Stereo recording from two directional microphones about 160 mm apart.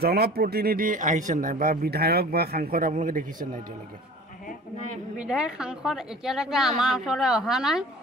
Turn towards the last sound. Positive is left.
turn(degrees=-5)  # may be behind; listen again after turning